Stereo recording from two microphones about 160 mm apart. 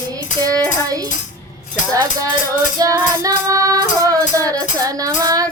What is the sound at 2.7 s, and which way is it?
Child singing, 20° right (ahead or behind).